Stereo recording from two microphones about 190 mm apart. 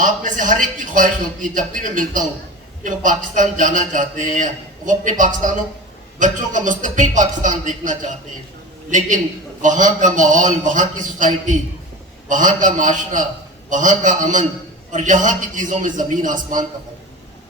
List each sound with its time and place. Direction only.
0.0 s a man's voice: 45° right (ahead or behind)